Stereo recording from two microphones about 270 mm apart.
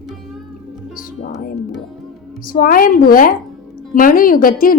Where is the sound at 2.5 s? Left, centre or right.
Left.